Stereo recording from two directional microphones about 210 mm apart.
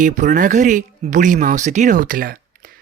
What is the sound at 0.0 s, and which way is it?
Speech, 40° right (ahead or behind).